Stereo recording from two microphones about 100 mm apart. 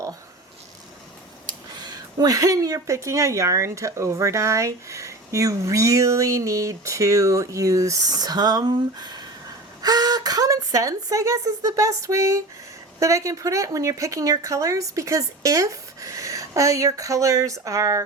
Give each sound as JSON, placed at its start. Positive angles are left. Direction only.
{"t": 1.5, "sound": "speech", "side_deg": -45}